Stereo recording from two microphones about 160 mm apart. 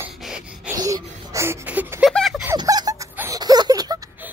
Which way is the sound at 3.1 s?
20° right (ahead or behind).